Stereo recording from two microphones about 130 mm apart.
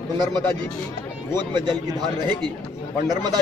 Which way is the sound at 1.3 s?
35° right (ahead or behind).